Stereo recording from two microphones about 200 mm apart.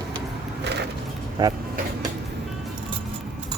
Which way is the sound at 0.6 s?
60° right (ahead or behind).